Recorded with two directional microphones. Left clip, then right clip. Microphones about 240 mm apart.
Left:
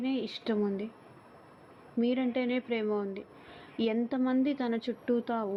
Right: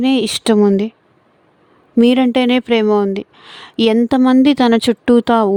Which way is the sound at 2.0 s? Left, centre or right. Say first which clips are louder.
Right 18 dB; right.